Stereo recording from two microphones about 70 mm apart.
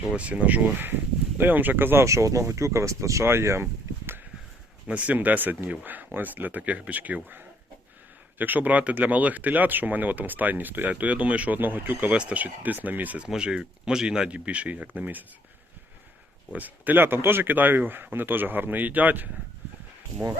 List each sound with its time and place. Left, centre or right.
0.2 s speech: centre
2.0 s speech: right
4.9 s speech: centre
13.2 s speech: centre
16.5 s speech: right